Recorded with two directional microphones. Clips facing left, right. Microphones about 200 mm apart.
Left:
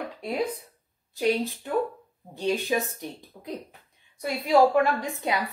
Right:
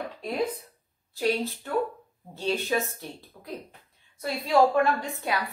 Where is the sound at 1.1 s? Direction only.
20° left (ahead or behind).